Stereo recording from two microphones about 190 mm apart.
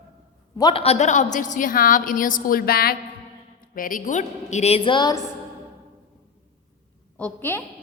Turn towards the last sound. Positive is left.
turn(degrees=10)  # may be behind; listen again after turning